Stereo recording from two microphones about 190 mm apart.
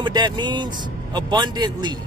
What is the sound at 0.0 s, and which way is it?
Speech, 25° right (ahead or behind).